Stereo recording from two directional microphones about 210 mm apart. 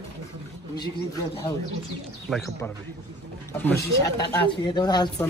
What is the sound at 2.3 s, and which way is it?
Speech, centre (ahead or behind).